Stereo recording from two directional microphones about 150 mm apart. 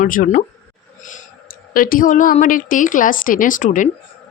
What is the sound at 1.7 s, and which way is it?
A woman's voice, 70° left (ahead or behind).